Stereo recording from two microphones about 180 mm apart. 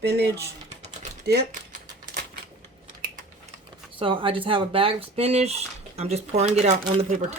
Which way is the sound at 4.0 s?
30° right (ahead or behind).